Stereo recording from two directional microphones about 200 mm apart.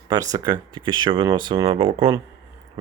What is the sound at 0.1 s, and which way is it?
Speech, 20° right (ahead or behind).